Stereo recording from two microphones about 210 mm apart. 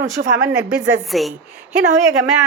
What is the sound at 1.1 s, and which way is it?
Speech, centre (ahead or behind).